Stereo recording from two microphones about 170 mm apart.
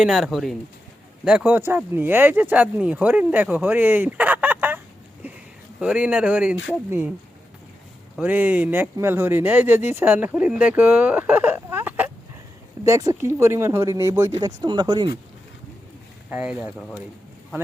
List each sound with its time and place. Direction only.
0.0 s speech: centre (ahead or behind)
5.2 s a sound: 10° right (ahead or behind)
5.8 s speech: 5° right (ahead or behind)
8.2 s speech: 10° right (ahead or behind)
16.3 s speech: 5° right (ahead or behind)